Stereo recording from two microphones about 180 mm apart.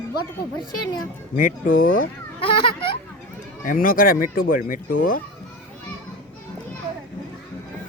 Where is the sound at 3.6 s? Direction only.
50° left (ahead or behind).